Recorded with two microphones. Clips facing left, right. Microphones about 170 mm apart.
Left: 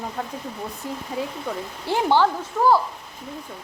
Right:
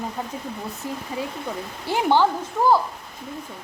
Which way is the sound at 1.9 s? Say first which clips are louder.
Even; 15° right (ahead or behind).